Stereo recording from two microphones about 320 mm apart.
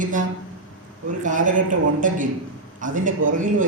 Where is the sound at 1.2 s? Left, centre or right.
Right.